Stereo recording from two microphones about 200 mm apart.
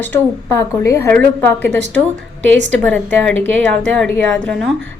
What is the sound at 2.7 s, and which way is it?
A woman's voice, 5° left (ahead or behind).